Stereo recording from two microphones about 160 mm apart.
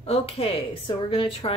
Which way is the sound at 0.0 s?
35° left (ahead or behind).